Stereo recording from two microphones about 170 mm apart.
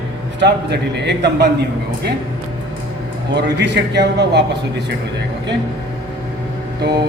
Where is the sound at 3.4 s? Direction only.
90° right.